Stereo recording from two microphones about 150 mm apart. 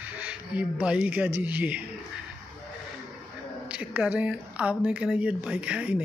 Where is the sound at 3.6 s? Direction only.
10° right (ahead or behind).